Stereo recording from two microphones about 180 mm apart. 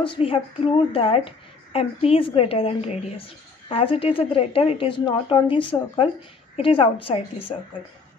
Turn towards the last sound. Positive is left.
turn(degrees=30)  # may be behind; listen again after turning